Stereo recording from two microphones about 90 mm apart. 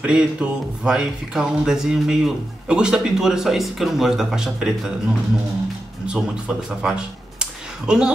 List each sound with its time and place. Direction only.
0.0 s speech: 10° right (ahead or behind)
6.0 s speech: 10° right (ahead or behind)